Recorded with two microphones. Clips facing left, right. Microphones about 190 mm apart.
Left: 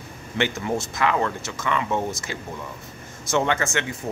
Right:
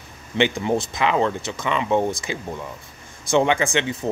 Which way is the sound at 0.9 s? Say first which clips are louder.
Right 3 dB; 20° right (ahead or behind).